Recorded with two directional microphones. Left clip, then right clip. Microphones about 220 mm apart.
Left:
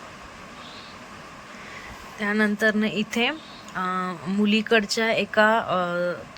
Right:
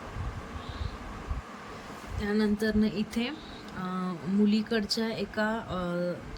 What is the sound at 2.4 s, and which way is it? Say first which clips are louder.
Speech: left 10 dB; 30° left (ahead or behind).